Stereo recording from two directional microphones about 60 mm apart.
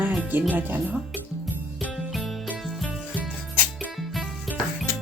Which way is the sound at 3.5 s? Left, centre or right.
Left.